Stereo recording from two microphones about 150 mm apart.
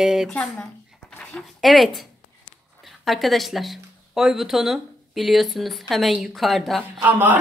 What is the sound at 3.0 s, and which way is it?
A woman's voice, centre (ahead or behind).